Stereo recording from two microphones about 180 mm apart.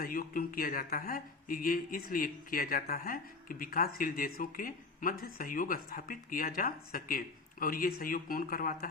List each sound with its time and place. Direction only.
0.0 s speech: 50° left (ahead or behind)